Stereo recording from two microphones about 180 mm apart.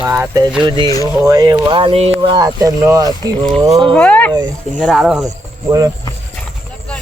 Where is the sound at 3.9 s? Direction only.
10° left (ahead or behind).